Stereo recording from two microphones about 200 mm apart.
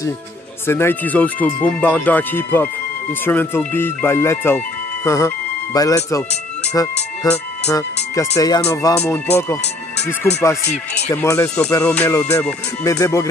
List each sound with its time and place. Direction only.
0.7 s speech: 10° left (ahead or behind)
7.2 s speech: 20° left (ahead or behind)